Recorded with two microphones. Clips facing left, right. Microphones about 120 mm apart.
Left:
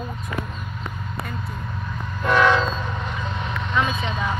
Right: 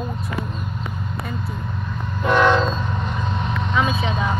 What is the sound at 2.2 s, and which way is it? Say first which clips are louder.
Train: right 2 dB; centre (ahead or behind).